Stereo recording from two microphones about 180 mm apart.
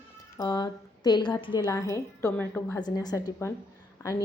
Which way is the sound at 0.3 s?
20° left (ahead or behind).